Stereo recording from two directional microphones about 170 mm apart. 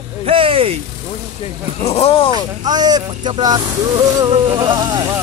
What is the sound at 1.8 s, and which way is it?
Speech, 35° left (ahead or behind).